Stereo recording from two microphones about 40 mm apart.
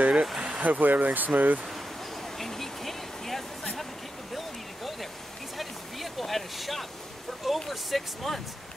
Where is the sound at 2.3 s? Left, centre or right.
Centre.